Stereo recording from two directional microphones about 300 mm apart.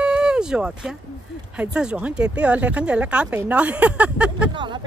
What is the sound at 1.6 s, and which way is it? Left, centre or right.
Speech, centre.